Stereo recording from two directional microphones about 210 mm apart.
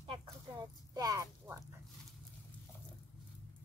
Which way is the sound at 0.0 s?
25° right (ahead or behind).